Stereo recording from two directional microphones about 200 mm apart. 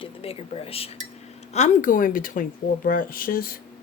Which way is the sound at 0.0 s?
30° left (ahead or behind).